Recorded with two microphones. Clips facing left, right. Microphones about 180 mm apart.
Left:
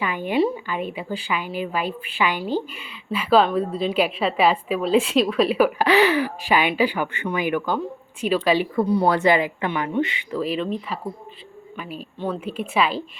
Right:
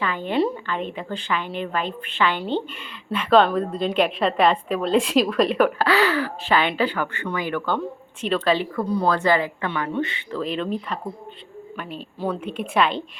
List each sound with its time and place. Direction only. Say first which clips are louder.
0.0 s a woman's voice: left 1 dB; 10° left (ahead or behind)
5.8 s a woman's voice: left 3 dB; 20° left (ahead or behind)